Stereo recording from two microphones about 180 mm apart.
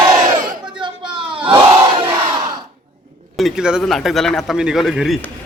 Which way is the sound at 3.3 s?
Centre (ahead or behind).